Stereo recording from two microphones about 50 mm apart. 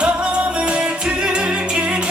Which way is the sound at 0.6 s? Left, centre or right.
Centre.